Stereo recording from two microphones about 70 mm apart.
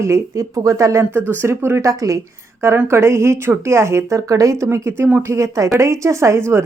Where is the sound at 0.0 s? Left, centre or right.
Right.